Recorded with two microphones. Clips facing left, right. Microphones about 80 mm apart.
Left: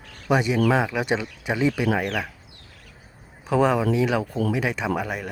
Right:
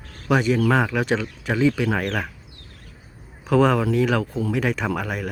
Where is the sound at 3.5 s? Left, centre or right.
Centre.